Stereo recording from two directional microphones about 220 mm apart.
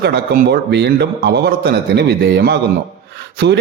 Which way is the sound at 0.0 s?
50° right (ahead or behind).